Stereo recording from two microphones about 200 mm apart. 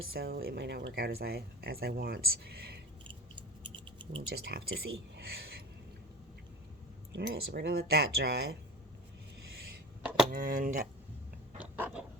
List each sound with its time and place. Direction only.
0.1 s speech: 50° right (ahead or behind)
3.9 s typing: 25° right (ahead or behind)
4.3 s speech: 55° right (ahead or behind)
7.1 s speech: 55° right (ahead or behind)
10.0 s a sound: 5° right (ahead or behind)
10.3 s speech: 45° right (ahead or behind)
11.6 s a sound: 5° right (ahead or behind)